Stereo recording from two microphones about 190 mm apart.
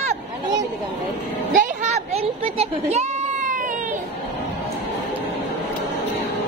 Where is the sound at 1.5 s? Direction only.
35° right (ahead or behind).